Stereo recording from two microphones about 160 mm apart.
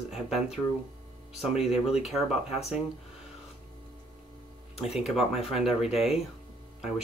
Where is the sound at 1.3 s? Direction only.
40° left (ahead or behind).